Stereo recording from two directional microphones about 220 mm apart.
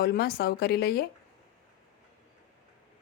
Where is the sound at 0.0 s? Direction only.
45° left (ahead or behind).